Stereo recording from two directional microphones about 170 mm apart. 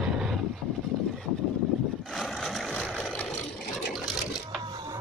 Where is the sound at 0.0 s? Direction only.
Centre (ahead or behind).